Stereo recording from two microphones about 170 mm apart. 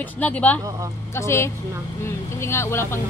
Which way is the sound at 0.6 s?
20° right (ahead or behind).